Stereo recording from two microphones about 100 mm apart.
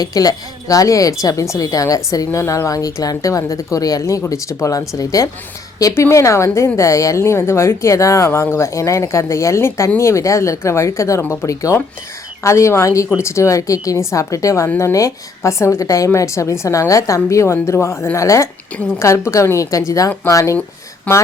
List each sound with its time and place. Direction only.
0.0 s a woman's voice: 40° left (ahead or behind)